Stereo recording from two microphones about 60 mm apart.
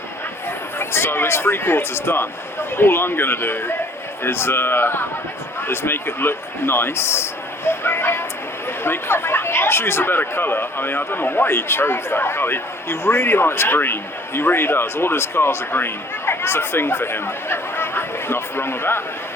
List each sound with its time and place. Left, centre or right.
0.8 s speech: left